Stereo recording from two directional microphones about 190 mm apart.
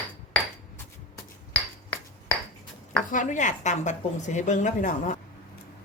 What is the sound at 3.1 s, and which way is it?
A woman's voice, 40° left (ahead or behind).